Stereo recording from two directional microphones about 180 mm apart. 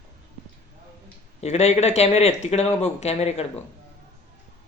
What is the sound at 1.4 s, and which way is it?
Speech, 35° left (ahead or behind).